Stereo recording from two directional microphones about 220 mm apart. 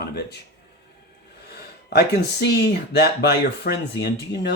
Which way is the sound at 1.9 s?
50° left (ahead or behind).